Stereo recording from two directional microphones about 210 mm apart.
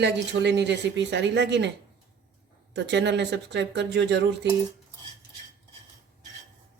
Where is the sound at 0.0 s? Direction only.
55° right (ahead or behind).